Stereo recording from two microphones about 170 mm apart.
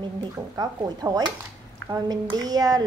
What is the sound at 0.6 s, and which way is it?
Speech, 20° right (ahead or behind).